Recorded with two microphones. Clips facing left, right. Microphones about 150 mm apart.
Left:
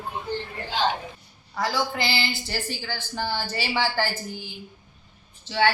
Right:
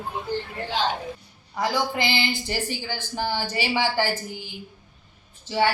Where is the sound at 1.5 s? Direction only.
15° right (ahead or behind).